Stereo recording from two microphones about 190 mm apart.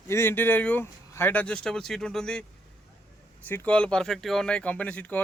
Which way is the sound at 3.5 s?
10° left (ahead or behind).